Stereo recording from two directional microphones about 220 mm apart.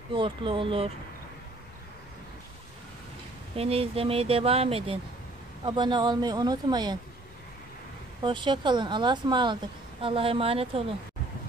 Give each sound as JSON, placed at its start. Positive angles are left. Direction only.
{"t": 0.1, "sound": "speech", "side_deg": -25}
{"t": 3.5, "sound": "speech", "side_deg": -25}
{"t": 8.2, "sound": "speech", "side_deg": -20}